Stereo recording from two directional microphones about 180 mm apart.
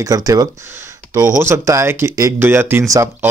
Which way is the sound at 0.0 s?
20° right (ahead or behind).